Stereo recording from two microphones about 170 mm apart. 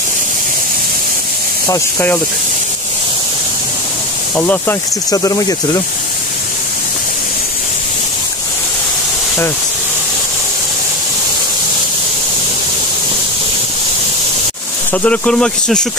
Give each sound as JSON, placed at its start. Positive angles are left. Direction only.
{"t": 1.7, "sound": "speech", "side_deg": 15}
{"t": 4.4, "sound": "speech", "side_deg": 10}
{"t": 14.9, "sound": "speech", "side_deg": 5}